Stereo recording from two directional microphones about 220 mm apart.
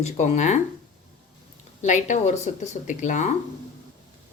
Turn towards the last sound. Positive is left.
turn(degrees=35)  # may be behind; listen again after turning